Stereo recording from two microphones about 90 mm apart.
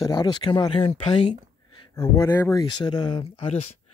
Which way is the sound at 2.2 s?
30° left (ahead or behind).